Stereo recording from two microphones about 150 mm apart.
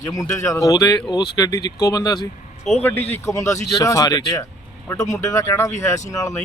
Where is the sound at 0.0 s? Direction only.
20° left (ahead or behind).